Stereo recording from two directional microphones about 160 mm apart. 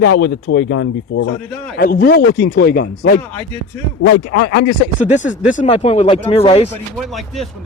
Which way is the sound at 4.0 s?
90° left.